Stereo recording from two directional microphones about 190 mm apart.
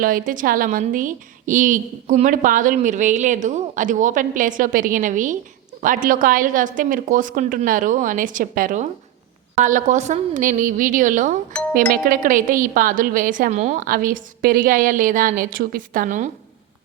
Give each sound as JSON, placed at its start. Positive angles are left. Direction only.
{"t": 0.0, "sound": "a woman's voice", "side_deg": -45}